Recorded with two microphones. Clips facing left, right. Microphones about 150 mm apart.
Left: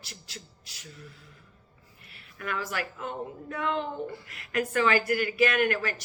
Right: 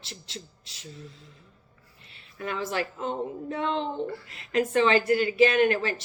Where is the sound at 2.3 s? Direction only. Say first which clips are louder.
Right 3 dB; 25° right (ahead or behind).